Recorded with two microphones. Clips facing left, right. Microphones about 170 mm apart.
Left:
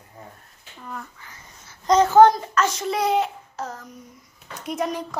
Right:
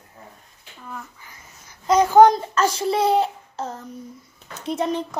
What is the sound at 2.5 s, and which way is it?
A woman's voice, 35° right (ahead or behind).